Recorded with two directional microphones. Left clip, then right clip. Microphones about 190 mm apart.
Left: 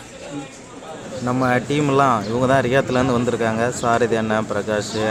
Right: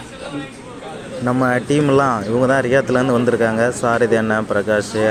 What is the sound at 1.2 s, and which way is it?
Speech, 15° right (ahead or behind).